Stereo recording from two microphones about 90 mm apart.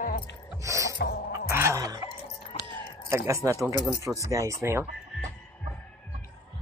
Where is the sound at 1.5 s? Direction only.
35° right (ahead or behind).